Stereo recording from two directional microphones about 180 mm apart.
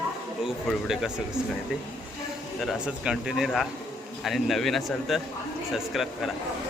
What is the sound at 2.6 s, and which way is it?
Speech, 5° right (ahead or behind).